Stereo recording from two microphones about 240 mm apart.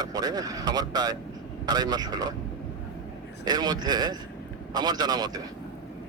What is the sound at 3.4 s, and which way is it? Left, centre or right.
Speech, centre.